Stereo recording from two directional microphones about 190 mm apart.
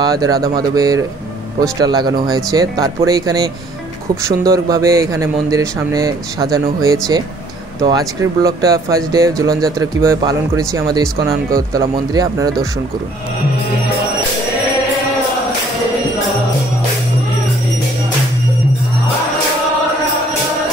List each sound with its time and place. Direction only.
0.0 s speech: 20° right (ahead or behind)